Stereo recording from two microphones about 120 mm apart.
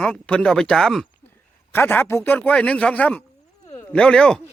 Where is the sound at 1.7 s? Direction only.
20° left (ahead or behind).